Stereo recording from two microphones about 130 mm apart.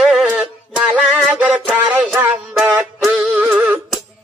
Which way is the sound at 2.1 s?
15° right (ahead or behind).